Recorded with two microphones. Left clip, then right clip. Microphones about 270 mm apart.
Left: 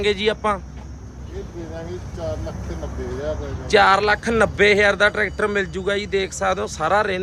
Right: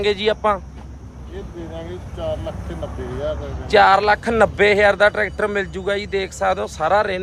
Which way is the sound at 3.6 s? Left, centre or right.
Centre.